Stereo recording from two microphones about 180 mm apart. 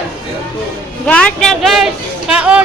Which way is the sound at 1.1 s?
5° left (ahead or behind).